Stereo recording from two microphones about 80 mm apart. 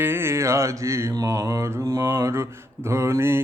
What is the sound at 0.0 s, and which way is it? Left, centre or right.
Mantra, right.